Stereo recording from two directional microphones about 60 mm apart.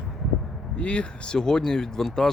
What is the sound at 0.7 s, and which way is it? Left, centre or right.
Speech, centre.